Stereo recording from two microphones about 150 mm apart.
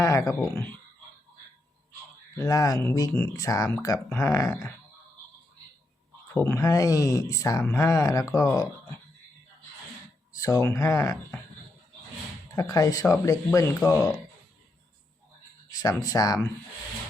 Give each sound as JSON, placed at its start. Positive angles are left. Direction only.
{"t": 0.0, "sound": "speech", "side_deg": 20}
{"t": 2.3, "sound": "speech", "side_deg": 20}
{"t": 6.3, "sound": "speech", "side_deg": 15}
{"t": 10.3, "sound": "speech", "side_deg": 20}
{"t": 12.5, "sound": "speech", "side_deg": 25}
{"t": 15.7, "sound": "speech", "side_deg": 25}